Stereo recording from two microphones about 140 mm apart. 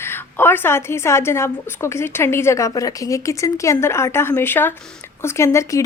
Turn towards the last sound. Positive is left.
turn(degrees=20)  # may be behind; listen again after turning